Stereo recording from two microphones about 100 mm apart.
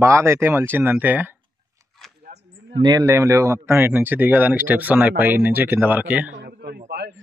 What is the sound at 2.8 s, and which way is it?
Speech, 35° right (ahead or behind).